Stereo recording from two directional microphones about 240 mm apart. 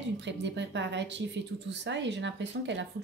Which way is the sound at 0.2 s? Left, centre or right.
Right.